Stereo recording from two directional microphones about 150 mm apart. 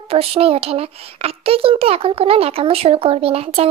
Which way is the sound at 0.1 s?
40° right (ahead or behind).